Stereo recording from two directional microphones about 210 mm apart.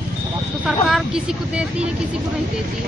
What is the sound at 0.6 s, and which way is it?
Speech, 5° right (ahead or behind).